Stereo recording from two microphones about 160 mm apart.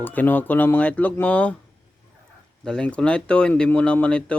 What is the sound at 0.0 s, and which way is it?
Speech, 10° left (ahead or behind).